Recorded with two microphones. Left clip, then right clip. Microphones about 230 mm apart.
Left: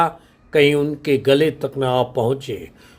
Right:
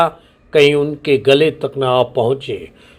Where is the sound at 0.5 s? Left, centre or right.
Centre.